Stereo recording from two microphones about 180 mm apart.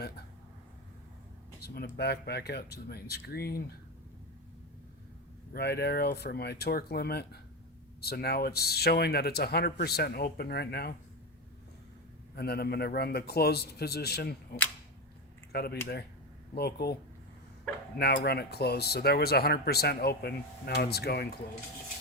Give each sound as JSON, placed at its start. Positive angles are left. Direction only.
{"t": 1.6, "sound": "speech", "side_deg": 60}
{"t": 5.5, "sound": "speech", "side_deg": 65}
{"t": 12.4, "sound": "speech", "side_deg": 60}
{"t": 15.5, "sound": "speech", "side_deg": 60}